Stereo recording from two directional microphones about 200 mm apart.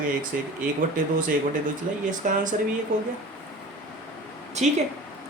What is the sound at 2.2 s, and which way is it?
Speech, 40° right (ahead or behind).